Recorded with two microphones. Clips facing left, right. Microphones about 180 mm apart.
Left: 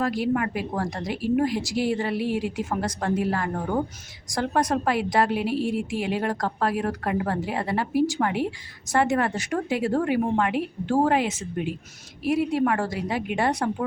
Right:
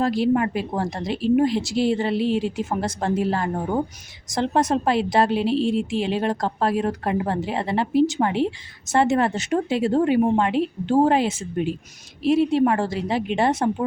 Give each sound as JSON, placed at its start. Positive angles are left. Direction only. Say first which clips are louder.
{"t": 0.0, "sound": "a woman's voice", "louder": "right 4 dB", "side_deg": -25}